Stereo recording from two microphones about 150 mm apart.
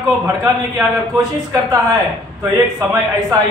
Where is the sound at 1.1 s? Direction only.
20° right (ahead or behind).